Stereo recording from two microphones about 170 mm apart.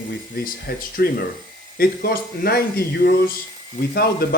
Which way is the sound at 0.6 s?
65° left (ahead or behind).